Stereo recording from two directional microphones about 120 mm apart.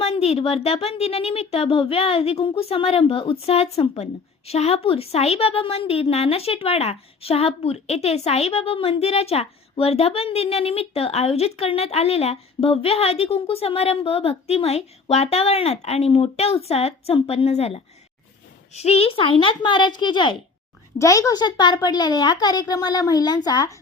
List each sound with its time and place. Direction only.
0.0 s a woman's voice: 60° left (ahead or behind); by 20.3 s 40° left (ahead or behind)
21.0 s a child's voice: 30° left (ahead or behind)